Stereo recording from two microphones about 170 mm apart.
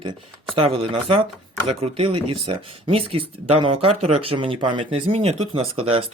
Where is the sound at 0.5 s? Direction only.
35° right (ahead or behind).